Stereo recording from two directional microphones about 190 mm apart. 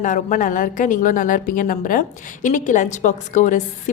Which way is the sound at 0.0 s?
40° left (ahead or behind).